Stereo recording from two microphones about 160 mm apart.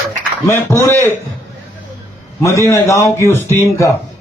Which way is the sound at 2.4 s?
20° left (ahead or behind).